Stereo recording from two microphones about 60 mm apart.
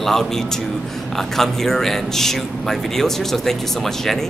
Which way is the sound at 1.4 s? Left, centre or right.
Centre.